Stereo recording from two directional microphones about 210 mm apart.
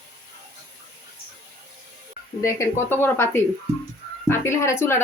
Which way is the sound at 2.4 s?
10° left (ahead or behind).